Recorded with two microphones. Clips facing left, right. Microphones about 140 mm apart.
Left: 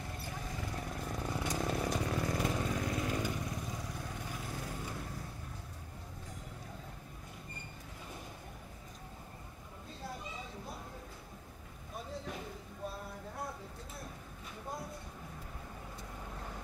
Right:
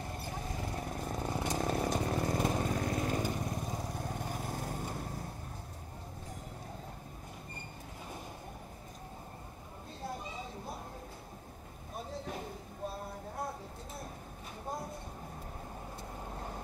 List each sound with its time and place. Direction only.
0.0 s vehicle: 35° right (ahead or behind)
16.3 s vehicle: 35° right (ahead or behind)